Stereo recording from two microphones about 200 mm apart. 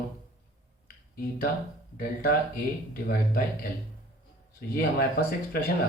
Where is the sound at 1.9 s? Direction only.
50° left (ahead or behind).